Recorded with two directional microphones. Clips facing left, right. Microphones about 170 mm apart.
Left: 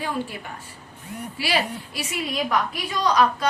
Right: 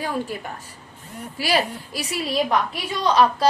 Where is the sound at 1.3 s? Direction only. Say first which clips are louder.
Right 3 dB; 40° right (ahead or behind).